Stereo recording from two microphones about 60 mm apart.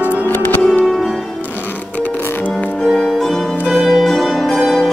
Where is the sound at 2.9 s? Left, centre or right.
Centre.